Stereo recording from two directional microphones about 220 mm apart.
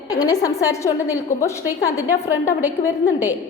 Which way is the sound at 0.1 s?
15° left (ahead or behind).